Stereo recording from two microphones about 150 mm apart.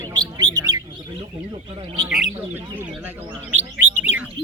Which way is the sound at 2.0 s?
5° right (ahead or behind).